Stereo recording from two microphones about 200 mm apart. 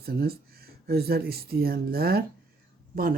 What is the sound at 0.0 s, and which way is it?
Speech, 50° right (ahead or behind).